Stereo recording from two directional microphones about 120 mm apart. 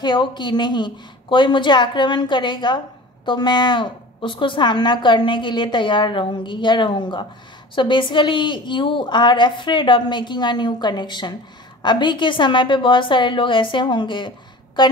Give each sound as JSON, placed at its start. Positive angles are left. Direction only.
{"t": 0.0, "sound": "a woman's voice", "side_deg": 40}